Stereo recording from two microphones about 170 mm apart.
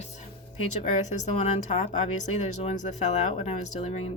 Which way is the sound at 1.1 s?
40° left (ahead or behind).